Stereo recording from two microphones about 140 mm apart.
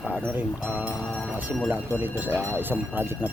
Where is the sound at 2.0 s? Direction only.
15° right (ahead or behind).